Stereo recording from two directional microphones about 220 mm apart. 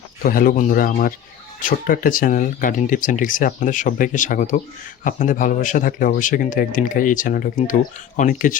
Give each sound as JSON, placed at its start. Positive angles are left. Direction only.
{"t": 0.2, "sound": "speech", "side_deg": 40}